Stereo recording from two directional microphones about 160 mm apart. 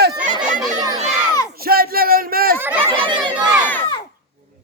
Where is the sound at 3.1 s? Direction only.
10° right (ahead or behind).